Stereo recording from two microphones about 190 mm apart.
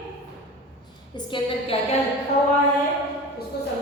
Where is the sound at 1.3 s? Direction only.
25° left (ahead or behind).